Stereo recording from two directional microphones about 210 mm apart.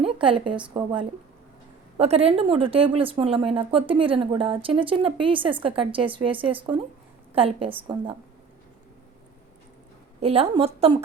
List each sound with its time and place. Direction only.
0.0 s speech: 25° right (ahead or behind)
10.2 s speech: 30° right (ahead or behind)